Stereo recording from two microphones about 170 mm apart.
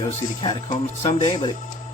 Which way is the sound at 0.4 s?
30° left (ahead or behind).